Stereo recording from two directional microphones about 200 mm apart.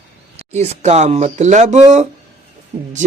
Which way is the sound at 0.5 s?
35° right (ahead or behind).